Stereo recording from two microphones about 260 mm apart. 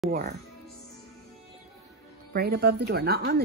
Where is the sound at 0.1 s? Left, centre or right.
Right.